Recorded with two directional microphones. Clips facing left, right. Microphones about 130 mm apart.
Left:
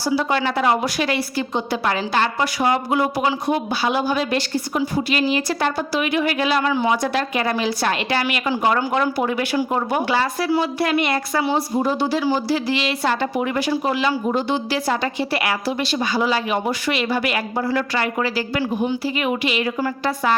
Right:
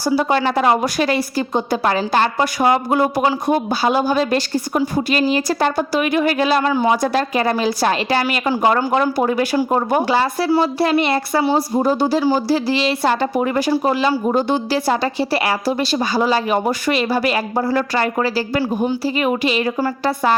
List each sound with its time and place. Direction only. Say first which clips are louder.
0.0 s a woman's voice: right 3 dB; 40° right (ahead or behind)